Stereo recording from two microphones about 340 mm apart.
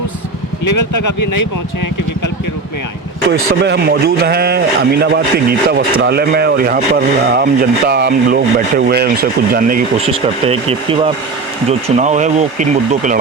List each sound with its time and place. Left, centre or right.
0.6 s speech: left
3.2 s a man's voice: right